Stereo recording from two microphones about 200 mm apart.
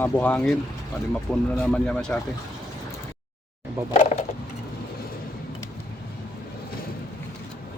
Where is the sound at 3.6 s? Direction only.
35° left (ahead or behind).